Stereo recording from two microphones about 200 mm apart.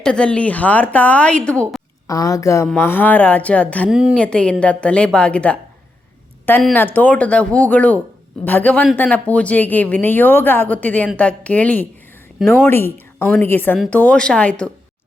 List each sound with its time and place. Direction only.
0.0 s a woman's voice: 5° left (ahead or behind)
2.0 s a woman's voice: 15° left (ahead or behind)